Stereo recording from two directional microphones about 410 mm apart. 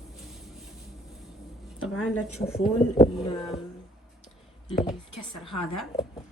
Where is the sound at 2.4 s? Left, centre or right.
Centre.